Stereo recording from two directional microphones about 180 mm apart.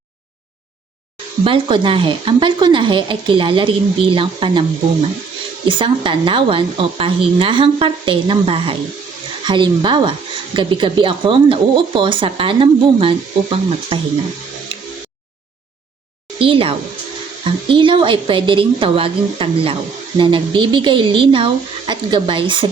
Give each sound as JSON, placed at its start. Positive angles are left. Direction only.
{"t": 1.5, "sound": "speech", "side_deg": -30}
{"t": 5.6, "sound": "speech", "side_deg": -30}
{"t": 16.4, "sound": "speech", "side_deg": -30}